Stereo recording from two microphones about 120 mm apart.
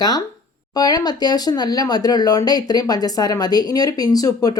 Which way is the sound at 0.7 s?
35° left (ahead or behind).